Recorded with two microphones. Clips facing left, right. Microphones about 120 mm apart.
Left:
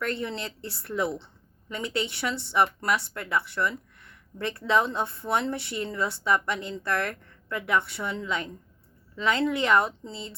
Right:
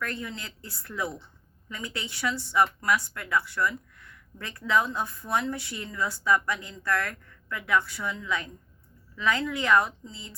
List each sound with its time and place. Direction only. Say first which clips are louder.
0.0 s speech: left 5 dB; 25° left (ahead or behind)